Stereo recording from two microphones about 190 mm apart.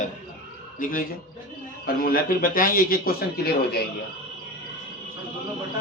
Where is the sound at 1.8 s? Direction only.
50° left (ahead or behind).